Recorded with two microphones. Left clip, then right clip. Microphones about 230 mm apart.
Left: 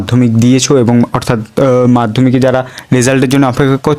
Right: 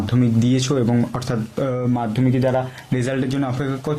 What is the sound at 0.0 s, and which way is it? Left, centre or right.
Speech, left.